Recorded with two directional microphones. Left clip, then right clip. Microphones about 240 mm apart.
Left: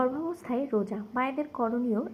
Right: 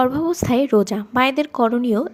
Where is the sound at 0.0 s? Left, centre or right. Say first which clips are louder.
Right 11 dB; right.